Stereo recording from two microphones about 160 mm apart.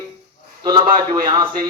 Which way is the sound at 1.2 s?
30° right (ahead or behind).